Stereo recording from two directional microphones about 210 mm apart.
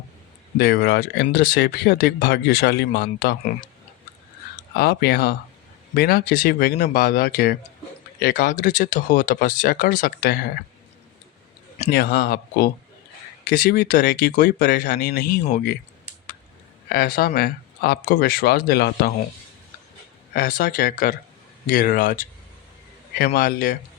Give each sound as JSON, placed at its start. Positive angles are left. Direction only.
{"t": 0.6, "sound": "speech", "side_deg": 50}
{"t": 4.7, "sound": "speech", "side_deg": 50}
{"t": 11.9, "sound": "speech", "side_deg": 50}
{"t": 16.9, "sound": "speech", "side_deg": 45}
{"t": 20.3, "sound": "speech", "side_deg": 45}